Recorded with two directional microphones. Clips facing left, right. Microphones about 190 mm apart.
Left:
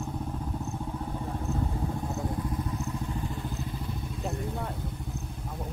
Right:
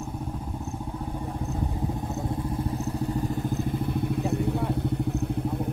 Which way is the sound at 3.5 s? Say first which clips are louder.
Right 8 dB; 60° right (ahead or behind).